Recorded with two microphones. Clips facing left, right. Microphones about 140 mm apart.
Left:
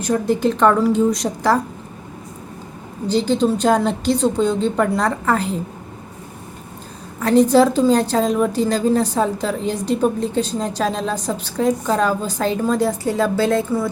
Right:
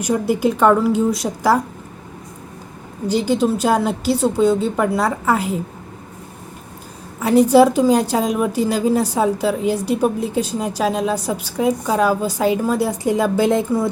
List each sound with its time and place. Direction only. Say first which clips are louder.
0.0 s a woman's voice: even; 10° right (ahead or behind)
3.1 s a woman's voice: even; 10° right (ahead or behind)
7.2 s a woman's voice: right 1 dB; 10° right (ahead or behind)